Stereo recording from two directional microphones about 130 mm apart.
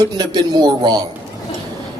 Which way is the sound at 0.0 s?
30° right (ahead or behind).